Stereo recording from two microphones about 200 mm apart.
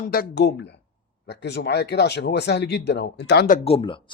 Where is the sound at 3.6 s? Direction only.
30° left (ahead or behind).